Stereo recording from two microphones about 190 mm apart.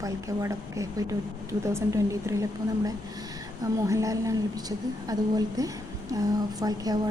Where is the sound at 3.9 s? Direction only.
15° right (ahead or behind).